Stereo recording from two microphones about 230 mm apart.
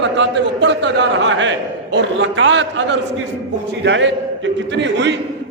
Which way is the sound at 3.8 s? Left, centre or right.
Right.